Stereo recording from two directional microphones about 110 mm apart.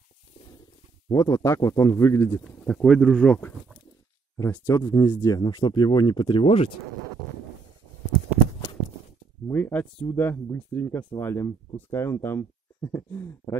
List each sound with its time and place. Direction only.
1.1 s speech: 30° left (ahead or behind)
2.4 s speech: 5° left (ahead or behind)
4.4 s speech: 30° left (ahead or behind); by 6.7 s 55° left (ahead or behind)
9.5 s speech: 15° left (ahead or behind)